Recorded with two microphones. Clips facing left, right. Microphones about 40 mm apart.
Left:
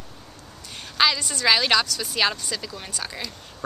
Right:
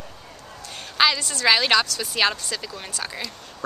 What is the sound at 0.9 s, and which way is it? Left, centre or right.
Speech, centre.